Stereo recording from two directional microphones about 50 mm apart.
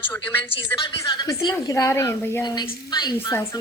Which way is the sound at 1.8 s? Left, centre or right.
Left.